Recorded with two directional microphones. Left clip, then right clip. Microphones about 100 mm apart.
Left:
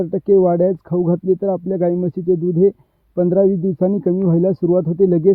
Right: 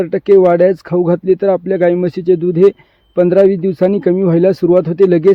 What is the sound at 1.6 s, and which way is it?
Speech, 10° left (ahead or behind).